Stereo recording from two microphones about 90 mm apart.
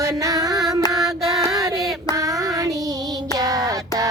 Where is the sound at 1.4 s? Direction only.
40° right (ahead or behind).